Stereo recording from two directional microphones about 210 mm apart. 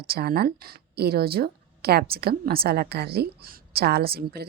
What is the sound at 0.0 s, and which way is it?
A woman's voice, 45° right (ahead or behind).